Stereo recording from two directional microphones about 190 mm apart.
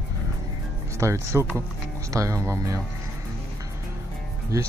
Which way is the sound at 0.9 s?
15° right (ahead or behind).